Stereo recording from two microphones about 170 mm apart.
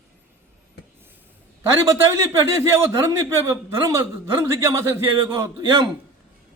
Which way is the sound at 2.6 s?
20° right (ahead or behind).